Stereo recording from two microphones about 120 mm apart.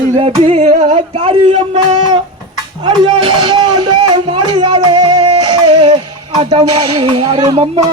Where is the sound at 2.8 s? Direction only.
40° right (ahead or behind).